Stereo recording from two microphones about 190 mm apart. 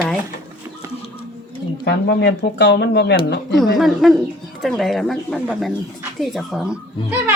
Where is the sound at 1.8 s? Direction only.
65° left (ahead or behind).